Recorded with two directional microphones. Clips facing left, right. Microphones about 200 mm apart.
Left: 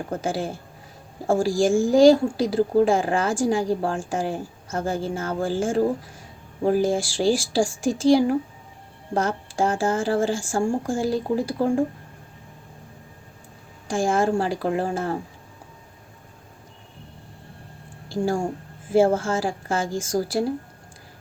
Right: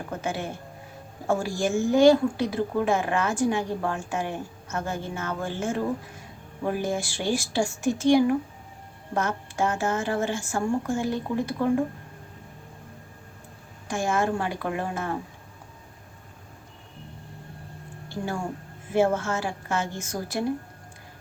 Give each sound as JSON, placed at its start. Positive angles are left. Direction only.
{"t": 0.2, "sound": "a woman's voice", "side_deg": 30}
{"t": 1.6, "sound": "a woman's voice", "side_deg": 30}
{"t": 13.8, "sound": "a woman's voice", "side_deg": 30}
{"t": 18.9, "sound": "a woman's voice", "side_deg": 30}